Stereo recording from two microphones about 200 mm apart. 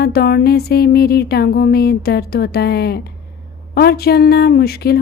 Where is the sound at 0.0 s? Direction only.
50° left (ahead or behind).